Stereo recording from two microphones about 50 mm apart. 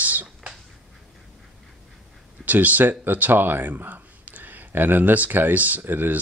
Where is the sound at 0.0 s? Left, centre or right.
Right.